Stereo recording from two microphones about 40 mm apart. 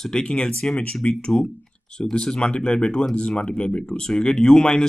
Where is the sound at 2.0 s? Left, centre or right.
Centre.